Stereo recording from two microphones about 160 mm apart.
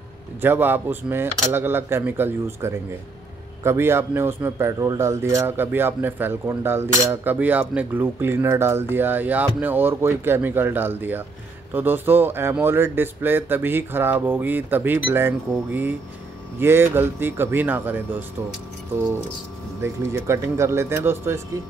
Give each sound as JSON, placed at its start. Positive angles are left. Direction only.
{"t": 0.4, "sound": "a man's voice", "side_deg": -15}
{"t": 19.8, "sound": "a man's voice", "side_deg": -15}